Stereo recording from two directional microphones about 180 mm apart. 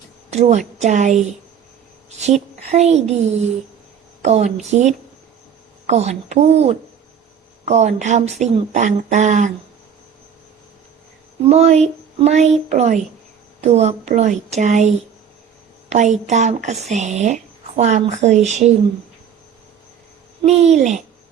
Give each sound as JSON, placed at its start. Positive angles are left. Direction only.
{"t": 0.3, "sound": "a woman's voice", "side_deg": -35}
{"t": 11.4, "sound": "a woman's voice", "side_deg": -35}
{"t": 20.4, "sound": "a woman's voice", "side_deg": -35}